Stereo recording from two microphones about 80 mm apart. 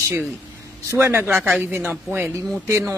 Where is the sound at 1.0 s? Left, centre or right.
Right.